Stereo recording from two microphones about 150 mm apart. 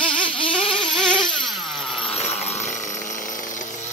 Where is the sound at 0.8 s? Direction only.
5° left (ahead or behind).